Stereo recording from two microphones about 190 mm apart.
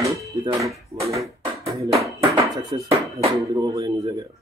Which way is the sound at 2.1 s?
15° right (ahead or behind).